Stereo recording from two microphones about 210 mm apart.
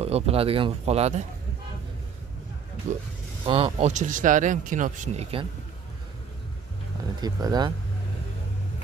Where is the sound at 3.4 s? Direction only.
25° right (ahead or behind).